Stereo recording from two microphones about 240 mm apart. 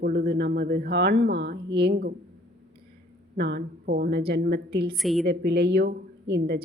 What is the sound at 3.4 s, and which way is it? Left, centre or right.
A woman's voice, right.